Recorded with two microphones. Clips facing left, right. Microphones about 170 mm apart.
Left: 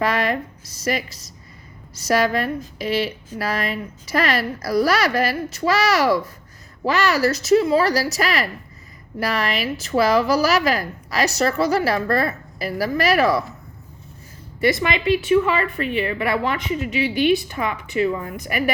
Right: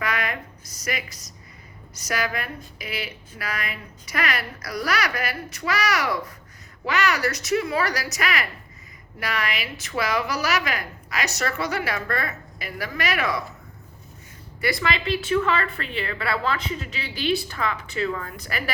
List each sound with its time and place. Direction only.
0.0 s a woman's voice: 30° left (ahead or behind)
9.8 s a woman's voice: 30° left (ahead or behind)
14.6 s speech: 20° left (ahead or behind)